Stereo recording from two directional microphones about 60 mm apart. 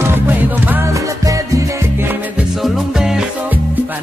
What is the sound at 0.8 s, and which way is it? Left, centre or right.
Music, right.